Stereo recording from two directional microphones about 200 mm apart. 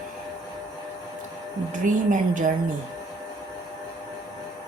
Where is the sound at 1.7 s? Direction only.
40° right (ahead or behind).